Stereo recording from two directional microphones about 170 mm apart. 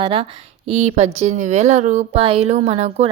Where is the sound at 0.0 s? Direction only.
35° right (ahead or behind).